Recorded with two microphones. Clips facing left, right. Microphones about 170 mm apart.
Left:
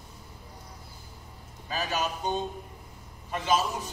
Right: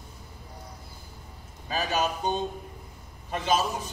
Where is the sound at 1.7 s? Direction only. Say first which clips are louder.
Right 3 dB; 25° right (ahead or behind).